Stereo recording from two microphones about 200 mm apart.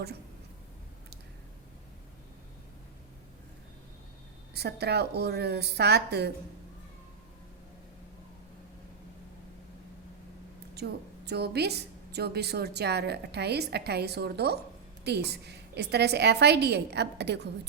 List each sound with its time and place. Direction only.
4.5 s a woman's voice: 55° right (ahead or behind)
11.3 s a woman's voice: 55° right (ahead or behind)